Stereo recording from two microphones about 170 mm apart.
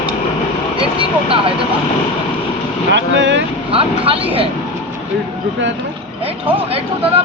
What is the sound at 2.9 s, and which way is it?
Speech, 90° right.